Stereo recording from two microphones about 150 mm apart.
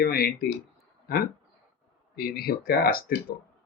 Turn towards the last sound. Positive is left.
turn(degrees=85)